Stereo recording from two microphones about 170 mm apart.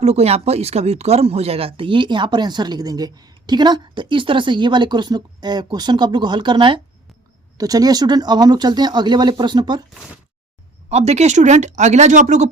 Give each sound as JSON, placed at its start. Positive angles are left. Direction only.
{"t": 0.0, "sound": "speech", "side_deg": -40}
{"t": 10.8, "sound": "speech", "side_deg": -40}